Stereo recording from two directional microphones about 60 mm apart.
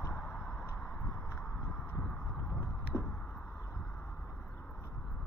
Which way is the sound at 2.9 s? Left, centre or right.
Centre.